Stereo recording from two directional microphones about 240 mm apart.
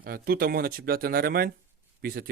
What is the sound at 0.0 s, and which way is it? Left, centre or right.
Speech, right.